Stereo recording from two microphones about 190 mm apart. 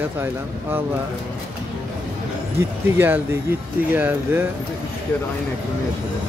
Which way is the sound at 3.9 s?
10° right (ahead or behind).